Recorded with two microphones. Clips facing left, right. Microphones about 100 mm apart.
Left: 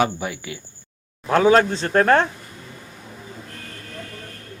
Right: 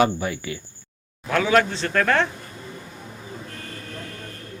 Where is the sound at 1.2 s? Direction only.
35° left (ahead or behind).